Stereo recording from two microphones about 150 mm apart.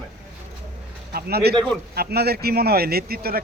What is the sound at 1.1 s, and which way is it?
Speech, 90° right.